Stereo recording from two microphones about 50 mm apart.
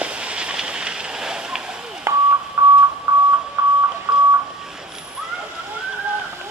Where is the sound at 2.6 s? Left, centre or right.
Right.